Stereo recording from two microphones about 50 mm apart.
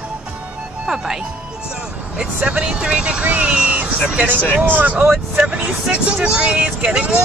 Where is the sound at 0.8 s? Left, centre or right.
Centre.